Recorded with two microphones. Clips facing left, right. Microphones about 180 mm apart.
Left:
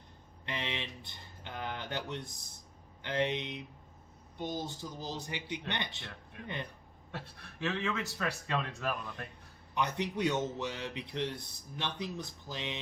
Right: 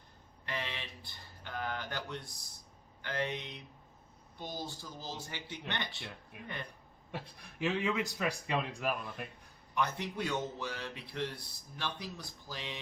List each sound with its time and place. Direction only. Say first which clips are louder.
0.4 s a sound: left 2 dB; 20° left (ahead or behind)
3.0 s speech: left 4 dB; 20° left (ahead or behind)
7.1 s a man's voice: right 1 dB; 15° right (ahead or behind)
9.7 s speech: left 2 dB; 20° left (ahead or behind)